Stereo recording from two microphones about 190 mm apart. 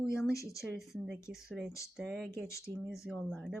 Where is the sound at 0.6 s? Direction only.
Centre (ahead or behind).